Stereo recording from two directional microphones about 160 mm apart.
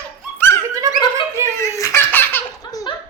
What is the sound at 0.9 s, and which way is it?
Snicker, 20° right (ahead or behind).